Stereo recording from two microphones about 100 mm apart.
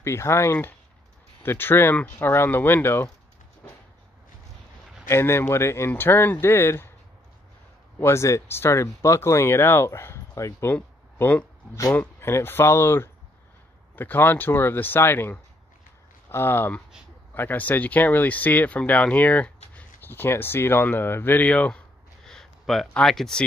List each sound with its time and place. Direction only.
0.0 s speech: 25° left (ahead or behind)
5.0 s speech: 25° left (ahead or behind)
8.0 s speech: 30° left (ahead or behind)
10.7 s speech: 20° left (ahead or behind); by 23.4 s 5° left (ahead or behind)